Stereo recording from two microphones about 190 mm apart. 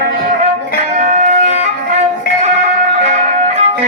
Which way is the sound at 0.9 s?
45° right (ahead or behind).